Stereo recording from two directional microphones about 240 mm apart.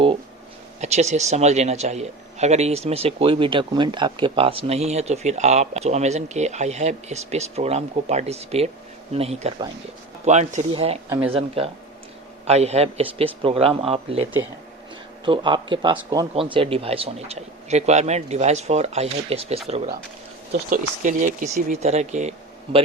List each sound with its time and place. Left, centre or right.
0.8 s a man's voice: right